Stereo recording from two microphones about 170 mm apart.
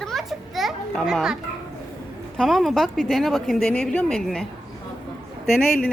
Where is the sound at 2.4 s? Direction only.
Centre (ahead or behind).